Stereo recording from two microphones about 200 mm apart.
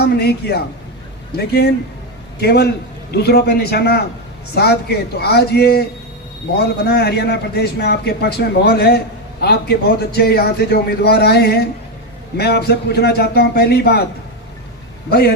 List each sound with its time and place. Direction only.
0.0 s a man's voice: 55° left (ahead or behind)